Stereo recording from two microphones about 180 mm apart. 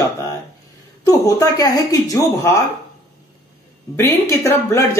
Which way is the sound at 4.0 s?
15° left (ahead or behind).